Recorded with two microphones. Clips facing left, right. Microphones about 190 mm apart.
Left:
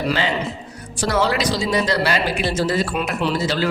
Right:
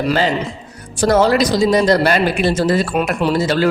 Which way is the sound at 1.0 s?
45° right (ahead or behind).